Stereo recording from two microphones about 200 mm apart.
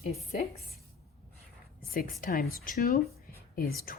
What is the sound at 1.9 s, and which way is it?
Speech, 45° left (ahead or behind).